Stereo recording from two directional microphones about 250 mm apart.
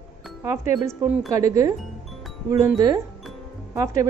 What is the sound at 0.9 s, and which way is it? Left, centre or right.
Speech, centre.